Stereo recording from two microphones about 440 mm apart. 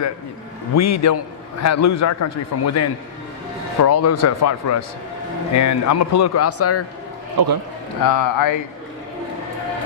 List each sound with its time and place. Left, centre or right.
0.8 s a man's voice: left
7.3 s a man's voice: right
8.0 s speech: left